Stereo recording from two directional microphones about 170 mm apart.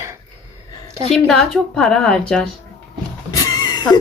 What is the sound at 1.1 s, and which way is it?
A woman's voice, centre (ahead or behind).